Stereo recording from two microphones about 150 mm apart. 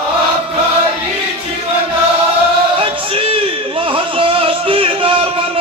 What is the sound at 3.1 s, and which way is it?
Music, 35° right (ahead or behind).